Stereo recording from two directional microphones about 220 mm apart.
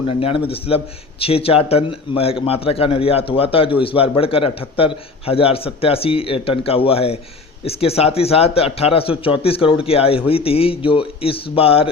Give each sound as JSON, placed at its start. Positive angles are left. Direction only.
{"t": 0.1, "sound": "a man's voice", "side_deg": 25}